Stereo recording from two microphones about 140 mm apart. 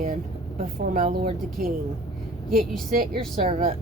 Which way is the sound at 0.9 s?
85° right.